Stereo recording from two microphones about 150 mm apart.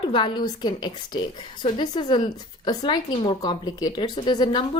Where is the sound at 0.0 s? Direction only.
30° left (ahead or behind).